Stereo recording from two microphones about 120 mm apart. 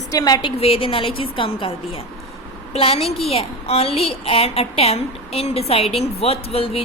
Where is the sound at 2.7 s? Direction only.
55° left (ahead or behind).